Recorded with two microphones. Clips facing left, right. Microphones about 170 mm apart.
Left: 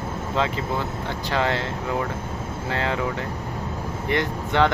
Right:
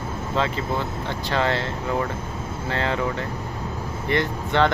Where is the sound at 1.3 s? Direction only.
10° left (ahead or behind).